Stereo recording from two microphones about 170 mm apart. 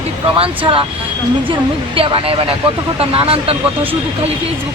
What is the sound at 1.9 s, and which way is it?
Speech, 30° right (ahead or behind).